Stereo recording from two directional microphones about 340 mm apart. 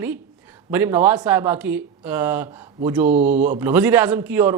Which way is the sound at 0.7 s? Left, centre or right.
Centre.